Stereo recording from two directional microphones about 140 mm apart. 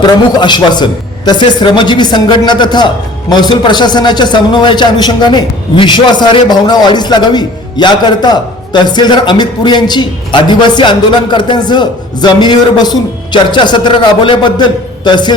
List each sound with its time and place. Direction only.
0.0 s a man's voice: 30° left (ahead or behind)